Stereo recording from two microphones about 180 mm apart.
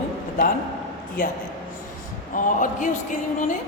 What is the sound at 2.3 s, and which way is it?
A woman's voice, 45° left (ahead or behind).